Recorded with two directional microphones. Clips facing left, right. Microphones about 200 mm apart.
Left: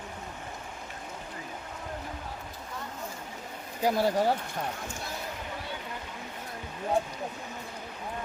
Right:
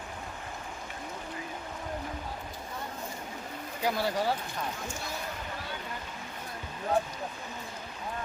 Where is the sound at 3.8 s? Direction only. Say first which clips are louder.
Left 4 dB; 50° left (ahead or behind).